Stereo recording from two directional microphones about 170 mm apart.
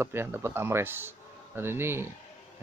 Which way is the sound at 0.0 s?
15° right (ahead or behind).